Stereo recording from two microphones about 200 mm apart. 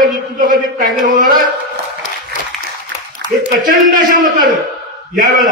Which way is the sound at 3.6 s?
40° right (ahead or behind).